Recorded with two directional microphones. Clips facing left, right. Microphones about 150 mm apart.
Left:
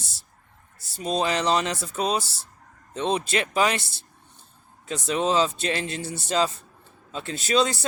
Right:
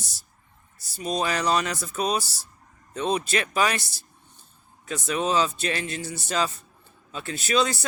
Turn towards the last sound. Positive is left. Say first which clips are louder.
# left 1 dB
turn(degrees=30)  # may be behind; listen again after turning